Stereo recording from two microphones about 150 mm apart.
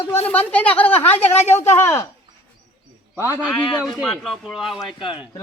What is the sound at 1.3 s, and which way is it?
Speech, 45° left (ahead or behind).